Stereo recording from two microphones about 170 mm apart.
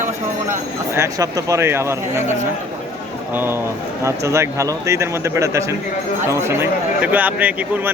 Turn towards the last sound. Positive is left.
turn(degrees=-10)  # may be behind; listen again after turning